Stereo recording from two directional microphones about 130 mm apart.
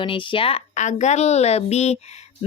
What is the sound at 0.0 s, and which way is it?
Speech, 40° left (ahead or behind).